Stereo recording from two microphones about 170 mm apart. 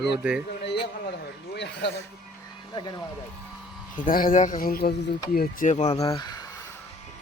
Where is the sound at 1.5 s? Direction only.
90° left.